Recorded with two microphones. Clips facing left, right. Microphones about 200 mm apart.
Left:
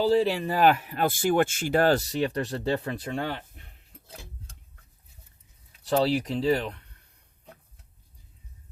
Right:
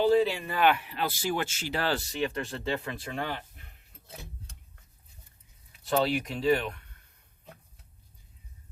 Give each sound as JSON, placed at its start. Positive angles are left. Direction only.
{"t": 0.0, "sound": "speech", "side_deg": 40}
{"t": 5.8, "sound": "speech", "side_deg": 30}